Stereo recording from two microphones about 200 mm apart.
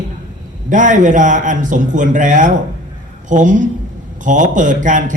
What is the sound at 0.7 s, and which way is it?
A man's voice, 40° right (ahead or behind).